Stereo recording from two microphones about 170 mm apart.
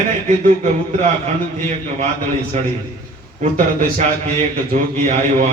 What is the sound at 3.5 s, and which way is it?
A man's voice, 45° right (ahead or behind).